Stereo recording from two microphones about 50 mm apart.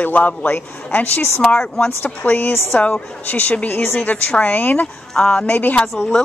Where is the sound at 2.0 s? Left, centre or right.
Left.